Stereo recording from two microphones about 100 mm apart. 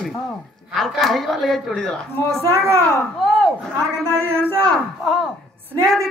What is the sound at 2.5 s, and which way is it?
Speech, 30° right (ahead or behind).